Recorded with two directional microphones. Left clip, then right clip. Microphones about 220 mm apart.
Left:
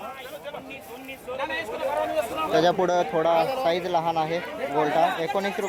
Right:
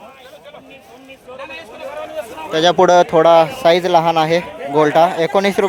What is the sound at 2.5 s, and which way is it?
A man's voice, 20° right (ahead or behind).